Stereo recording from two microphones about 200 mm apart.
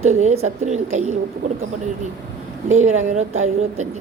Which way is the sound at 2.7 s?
35° right (ahead or behind).